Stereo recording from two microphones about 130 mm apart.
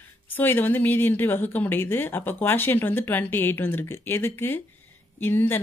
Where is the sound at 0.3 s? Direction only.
15° left (ahead or behind).